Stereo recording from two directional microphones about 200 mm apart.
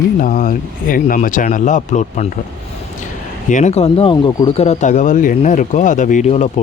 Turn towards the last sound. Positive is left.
turn(degrees=35)  # may be behind; listen again after turning